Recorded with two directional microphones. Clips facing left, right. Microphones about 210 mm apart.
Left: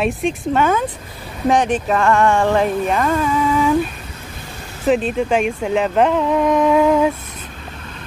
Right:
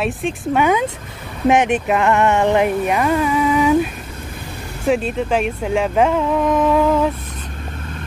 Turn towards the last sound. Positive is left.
turn(degrees=0)  # may be behind; listen again after turning